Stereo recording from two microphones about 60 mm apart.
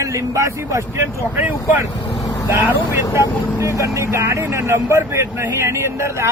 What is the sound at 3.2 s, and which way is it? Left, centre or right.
A man's voice, right.